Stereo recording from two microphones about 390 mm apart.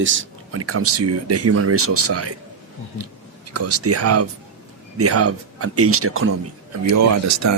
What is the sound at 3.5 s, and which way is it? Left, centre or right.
Speech, right.